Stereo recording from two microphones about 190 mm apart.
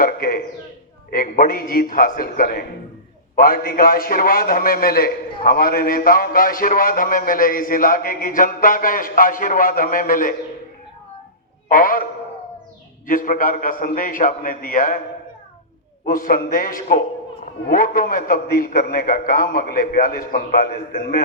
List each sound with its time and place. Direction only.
0.0 s a sound: 50° left (ahead or behind)
1.1 s a man's voice: 45° left (ahead or behind)
11.7 s a man's voice: 50° left (ahead or behind)
13.1 s a man's voice: 45° left (ahead or behind)
16.0 s a man's voice: 50° left (ahead or behind)